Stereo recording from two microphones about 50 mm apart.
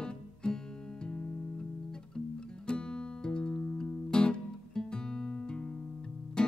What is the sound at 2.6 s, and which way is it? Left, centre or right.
Music, centre.